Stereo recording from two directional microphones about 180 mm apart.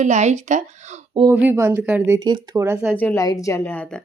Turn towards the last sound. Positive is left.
turn(degrees=10)  # may be behind; listen again after turning